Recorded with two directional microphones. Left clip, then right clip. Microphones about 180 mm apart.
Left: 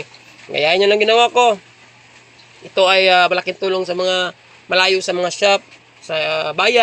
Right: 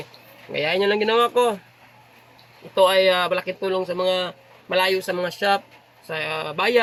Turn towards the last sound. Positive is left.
turn(degrees=10)  # may be behind; listen again after turning